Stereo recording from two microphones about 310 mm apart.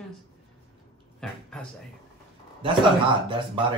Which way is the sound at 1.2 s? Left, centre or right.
Centre.